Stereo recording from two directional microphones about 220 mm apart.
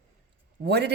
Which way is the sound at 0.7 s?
50° right (ahead or behind).